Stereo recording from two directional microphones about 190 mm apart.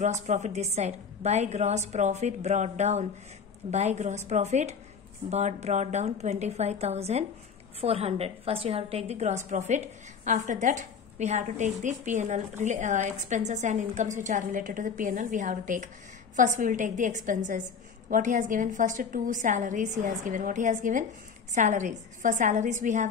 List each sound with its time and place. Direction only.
0.0 s a woman's voice: 35° right (ahead or behind)